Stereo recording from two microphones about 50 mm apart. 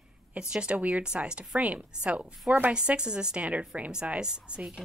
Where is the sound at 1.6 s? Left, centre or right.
Right.